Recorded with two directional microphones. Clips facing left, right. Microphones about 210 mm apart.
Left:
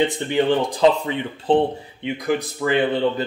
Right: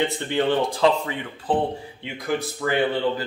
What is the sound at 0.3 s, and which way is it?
Speech, 15° left (ahead or behind).